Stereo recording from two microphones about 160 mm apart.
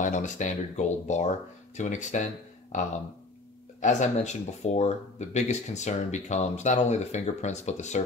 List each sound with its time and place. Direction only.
0.0 s speech: 50° left (ahead or behind)
3.8 s speech: 45° left (ahead or behind)